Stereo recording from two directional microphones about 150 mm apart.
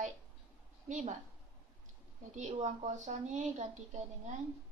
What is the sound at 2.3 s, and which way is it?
Speech, 50° right (ahead or behind).